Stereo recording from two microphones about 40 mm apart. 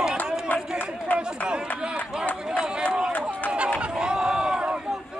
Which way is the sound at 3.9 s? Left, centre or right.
Centre.